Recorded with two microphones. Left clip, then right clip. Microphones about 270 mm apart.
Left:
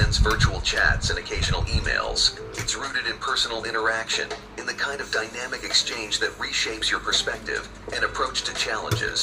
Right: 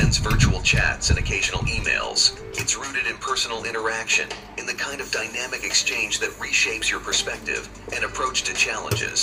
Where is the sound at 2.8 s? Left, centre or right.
Right.